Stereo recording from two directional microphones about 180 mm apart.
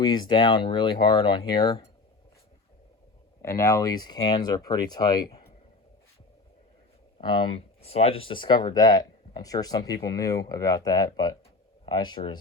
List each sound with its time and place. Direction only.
0.0 s speech: 25° left (ahead or behind)
3.4 s speech: 15° left (ahead or behind)
7.2 s speech: 25° left (ahead or behind)